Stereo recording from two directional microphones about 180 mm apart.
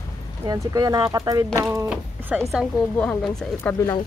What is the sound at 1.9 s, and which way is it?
Speech, 5° right (ahead or behind).